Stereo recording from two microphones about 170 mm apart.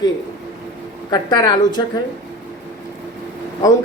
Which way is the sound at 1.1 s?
25° left (ahead or behind).